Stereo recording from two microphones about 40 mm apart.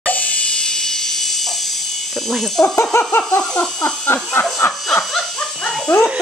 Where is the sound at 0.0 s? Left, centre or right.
Left.